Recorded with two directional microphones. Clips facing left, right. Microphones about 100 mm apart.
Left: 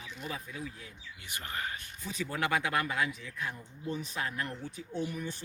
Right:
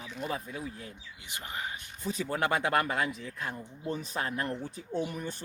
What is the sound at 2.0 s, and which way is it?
Speech, 35° right (ahead or behind).